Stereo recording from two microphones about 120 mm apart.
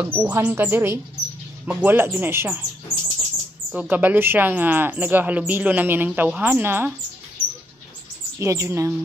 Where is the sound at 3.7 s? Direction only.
10° right (ahead or behind).